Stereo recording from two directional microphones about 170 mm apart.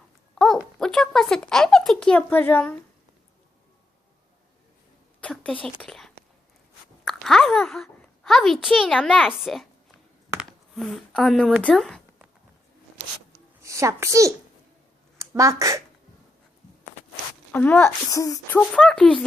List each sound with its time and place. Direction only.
0.3 s a sound: centre (ahead or behind)
0.8 s speech: 5° left (ahead or behind)
5.2 s a sound: 5° left (ahead or behind)
5.6 s whispering: 5° left (ahead or behind)
7.0 s speech: 5° left (ahead or behind)
10.4 s a sound: centre (ahead or behind)
13.6 s a child's voice: 15° right (ahead or behind)
17.5 s speech: 10° left (ahead or behind)
18.7 s speech: 5° left (ahead or behind)